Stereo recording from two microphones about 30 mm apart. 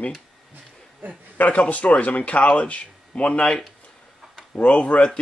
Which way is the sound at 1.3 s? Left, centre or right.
Left.